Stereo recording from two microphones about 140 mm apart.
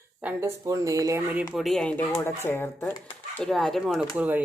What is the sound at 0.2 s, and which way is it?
Speech, 15° right (ahead or behind).